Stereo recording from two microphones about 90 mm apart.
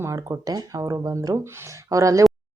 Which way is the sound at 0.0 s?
40° right (ahead or behind).